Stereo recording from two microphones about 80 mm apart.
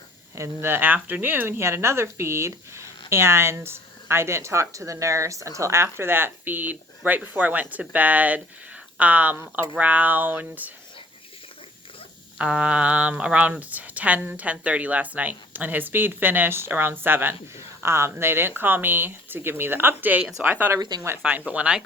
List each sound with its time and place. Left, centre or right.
0.3 s speech: right
12.4 s speech: centre